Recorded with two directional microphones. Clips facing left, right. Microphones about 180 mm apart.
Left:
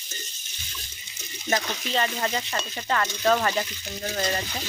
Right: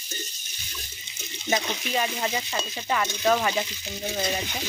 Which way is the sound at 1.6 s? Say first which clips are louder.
Even; 15° right (ahead or behind).